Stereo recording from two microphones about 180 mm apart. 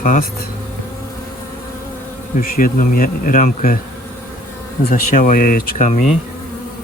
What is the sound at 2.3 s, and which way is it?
Bee, 55° left (ahead or behind).